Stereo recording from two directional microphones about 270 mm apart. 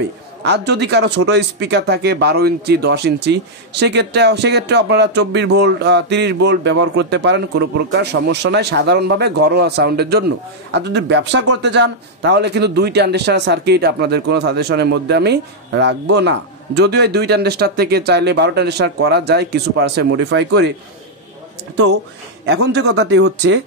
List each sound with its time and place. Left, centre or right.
0.4 s speech: right
21.7 s speech: right